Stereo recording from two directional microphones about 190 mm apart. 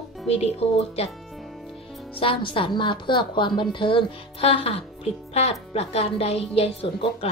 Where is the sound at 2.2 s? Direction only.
25° left (ahead or behind).